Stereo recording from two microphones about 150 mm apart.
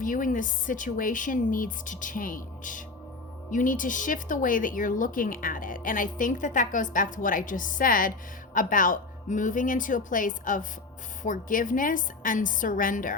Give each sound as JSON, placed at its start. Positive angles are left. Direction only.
{"t": 0.0, "sound": "a woman's voice", "side_deg": 65}